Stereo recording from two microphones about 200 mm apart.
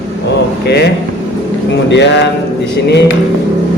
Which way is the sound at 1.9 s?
60° left (ahead or behind).